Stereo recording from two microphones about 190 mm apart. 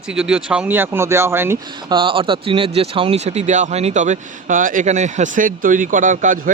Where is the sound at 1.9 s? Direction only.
25° right (ahead or behind); by 6.4 s 45° right (ahead or behind).